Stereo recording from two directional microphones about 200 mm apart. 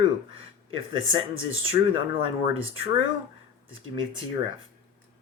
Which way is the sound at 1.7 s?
25° right (ahead or behind).